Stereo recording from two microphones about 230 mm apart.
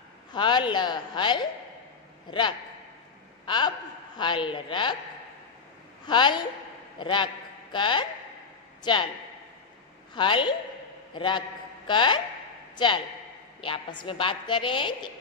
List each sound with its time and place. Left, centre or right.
0.3 s a woman's voice: centre
3.4 s a man's voice: centre
6.0 s a woman's voice: centre
10.1 s a woman's voice: left